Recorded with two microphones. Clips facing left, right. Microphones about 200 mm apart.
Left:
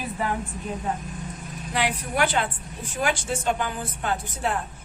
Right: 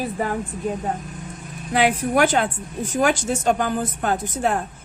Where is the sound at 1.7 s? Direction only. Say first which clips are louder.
Right 8 dB; 50° right (ahead or behind).